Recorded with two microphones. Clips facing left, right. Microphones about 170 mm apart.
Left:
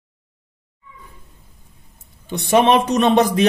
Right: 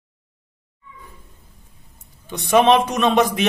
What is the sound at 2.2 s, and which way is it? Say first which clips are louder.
Speech: even; 30° left (ahead or behind).